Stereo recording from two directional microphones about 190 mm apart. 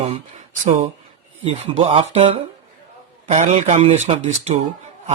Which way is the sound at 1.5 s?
35° right (ahead or behind).